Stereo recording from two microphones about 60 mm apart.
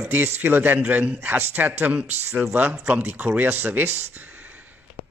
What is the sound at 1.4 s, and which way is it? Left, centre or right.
A man's voice, right.